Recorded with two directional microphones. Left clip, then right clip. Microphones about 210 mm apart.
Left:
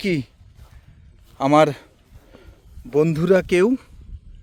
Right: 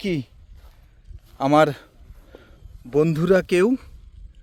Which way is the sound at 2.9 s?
Centre (ahead or behind).